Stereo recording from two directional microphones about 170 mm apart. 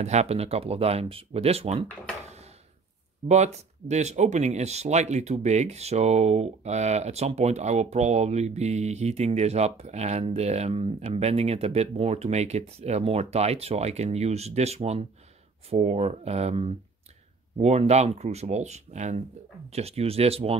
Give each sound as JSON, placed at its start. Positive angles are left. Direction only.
{"t": 0.0, "sound": "speech", "side_deg": -40}
{"t": 3.3, "sound": "speech", "side_deg": -40}